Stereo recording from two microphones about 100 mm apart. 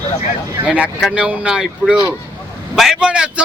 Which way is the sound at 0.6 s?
15° right (ahead or behind).